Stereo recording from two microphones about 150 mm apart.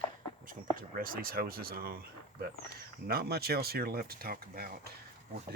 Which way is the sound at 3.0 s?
90° right.